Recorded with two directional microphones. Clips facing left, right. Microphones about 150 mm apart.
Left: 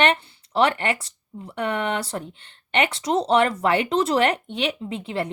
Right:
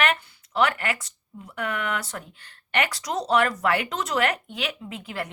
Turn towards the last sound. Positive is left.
turn(degrees=30)  # may be behind; listen again after turning